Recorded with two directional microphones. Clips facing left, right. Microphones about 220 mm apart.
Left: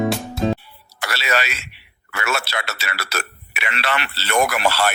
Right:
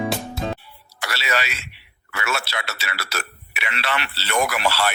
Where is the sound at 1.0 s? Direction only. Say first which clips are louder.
Left 3 dB; 50° left (ahead or behind).